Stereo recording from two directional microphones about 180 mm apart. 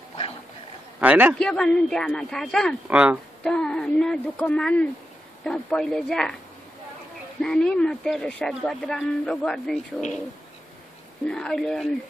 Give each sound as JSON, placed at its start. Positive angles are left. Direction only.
{"t": 1.0, "sound": "a man's voice", "side_deg": -10}
{"t": 1.4, "sound": "speech", "side_deg": 5}
{"t": 7.4, "sound": "speech", "side_deg": 5}
{"t": 11.2, "sound": "speech", "side_deg": 5}